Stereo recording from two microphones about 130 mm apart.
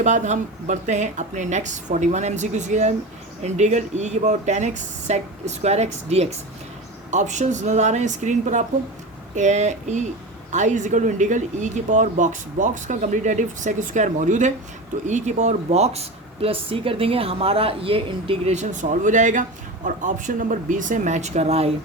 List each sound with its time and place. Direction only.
0.0 s speech: 65° right (ahead or behind)
7.1 s speech: 70° right (ahead or behind); by 18.5 s 45° right (ahead or behind)
18.5 s speech: 70° right (ahead or behind)